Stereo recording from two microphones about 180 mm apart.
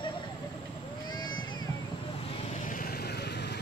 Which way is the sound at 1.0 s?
25° left (ahead or behind).